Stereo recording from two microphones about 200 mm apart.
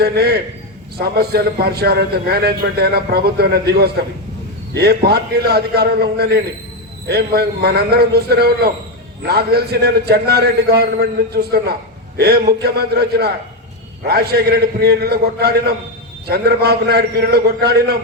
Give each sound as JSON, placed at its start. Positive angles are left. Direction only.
{"t": 0.0, "sound": "a man's voice", "side_deg": -50}